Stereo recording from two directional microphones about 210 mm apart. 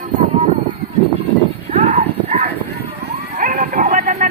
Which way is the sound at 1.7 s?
30° right (ahead or behind).